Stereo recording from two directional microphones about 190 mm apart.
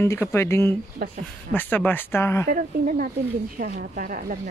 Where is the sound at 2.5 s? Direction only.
45° right (ahead or behind).